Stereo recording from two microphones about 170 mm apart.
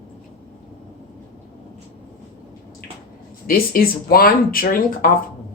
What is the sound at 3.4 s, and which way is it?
A woman's voice, 60° left (ahead or behind).